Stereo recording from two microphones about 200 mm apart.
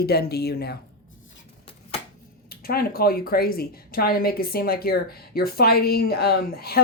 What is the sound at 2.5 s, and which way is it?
Speech, 50° left (ahead or behind).